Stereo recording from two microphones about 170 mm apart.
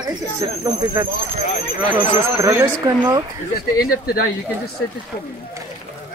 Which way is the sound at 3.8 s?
60° left (ahead or behind).